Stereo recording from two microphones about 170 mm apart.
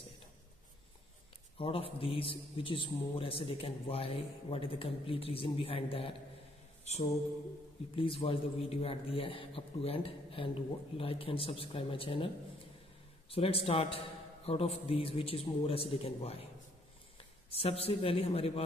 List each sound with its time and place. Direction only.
1.6 s a man's voice: 35° left (ahead or behind)
6.8 s mantra: 40° left (ahead or behind)
7.9 s a man's voice: 30° left (ahead or behind)
13.3 s a man's voice: 35° left (ahead or behind)
17.5 s a man's voice: 35° left (ahead or behind)